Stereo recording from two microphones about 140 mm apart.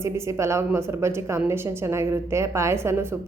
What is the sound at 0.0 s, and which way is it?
A woman's voice, 20° right (ahead or behind).